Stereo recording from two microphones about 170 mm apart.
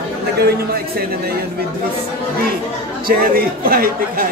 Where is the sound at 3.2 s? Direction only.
60° right (ahead or behind).